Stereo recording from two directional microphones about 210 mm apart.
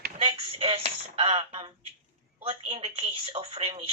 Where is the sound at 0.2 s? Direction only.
25° right (ahead or behind).